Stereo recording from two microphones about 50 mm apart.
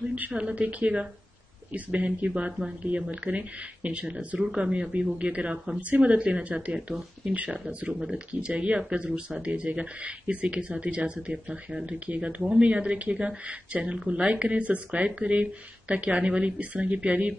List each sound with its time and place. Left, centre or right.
0.1 s speech: right